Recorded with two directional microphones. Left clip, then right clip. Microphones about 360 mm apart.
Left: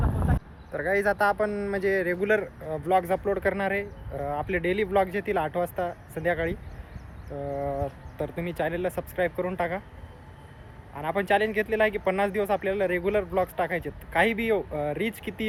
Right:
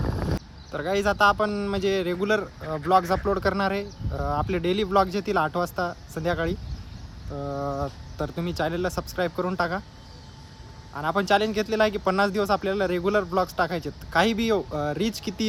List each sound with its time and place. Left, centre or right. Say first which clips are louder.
0.7 s speech: even; centre
1.8 s speech: even; centre
2.0 s speech: even; centre
10.9 s speech: right 2 dB; centre